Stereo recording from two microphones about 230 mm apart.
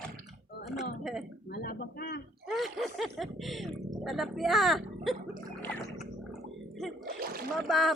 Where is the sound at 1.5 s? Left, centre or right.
Left.